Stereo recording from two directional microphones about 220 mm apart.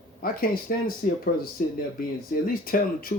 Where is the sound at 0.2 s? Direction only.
40° left (ahead or behind).